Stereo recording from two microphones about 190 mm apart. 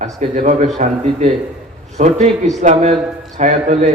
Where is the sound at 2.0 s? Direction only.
40° right (ahead or behind).